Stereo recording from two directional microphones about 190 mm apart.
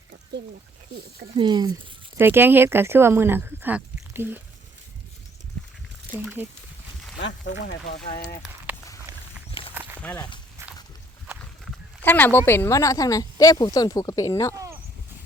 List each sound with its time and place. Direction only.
1.4 s speech: 20° right (ahead or behind)
6.1 s speech: 10° right (ahead or behind)
7.2 s speech: 70° left (ahead or behind)
7.6 s speech: 50° left (ahead or behind)
8.7 s a sound: 10° right (ahead or behind)
10.0 s speech: 10° left (ahead or behind)
11.6 s a sound: 10° left (ahead or behind)
12.5 s speech: 15° left (ahead or behind)
14.5 s a sound: 15° right (ahead or behind)